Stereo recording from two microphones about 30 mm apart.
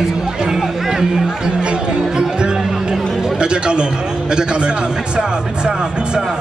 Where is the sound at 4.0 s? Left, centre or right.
Right.